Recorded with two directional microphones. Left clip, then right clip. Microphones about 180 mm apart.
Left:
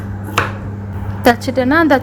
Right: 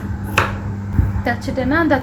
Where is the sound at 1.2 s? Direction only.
60° left (ahead or behind).